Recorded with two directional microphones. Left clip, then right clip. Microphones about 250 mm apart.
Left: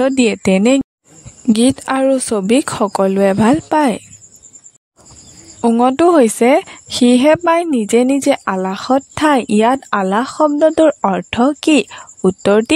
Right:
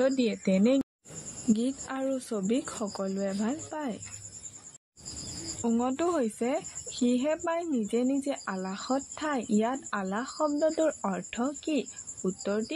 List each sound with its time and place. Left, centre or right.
0.0 s speech: left
5.6 s speech: left